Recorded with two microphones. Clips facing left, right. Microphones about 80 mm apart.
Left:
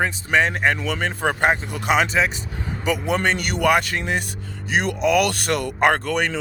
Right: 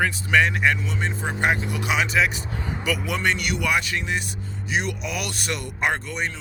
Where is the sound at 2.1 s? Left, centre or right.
Left.